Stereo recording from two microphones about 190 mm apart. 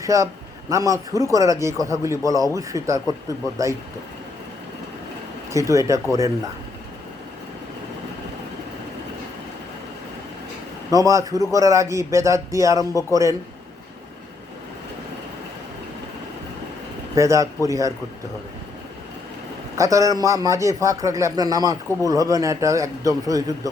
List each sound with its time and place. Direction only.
0.0 s a man's voice: 15° right (ahead or behind)
5.5 s a man's voice: 15° right (ahead or behind)
10.9 s a man's voice: 15° right (ahead or behind)
12.9 s a man's voice: 20° left (ahead or behind)
17.2 s a man's voice: 15° right (ahead or behind)
19.7 s a man's voice: 15° right (ahead or behind)